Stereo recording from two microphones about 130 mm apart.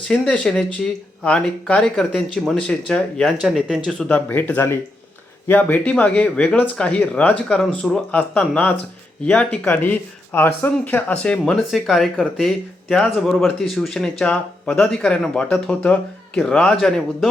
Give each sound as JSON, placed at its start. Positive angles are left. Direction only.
{"t": 0.0, "sound": "speech", "side_deg": 5}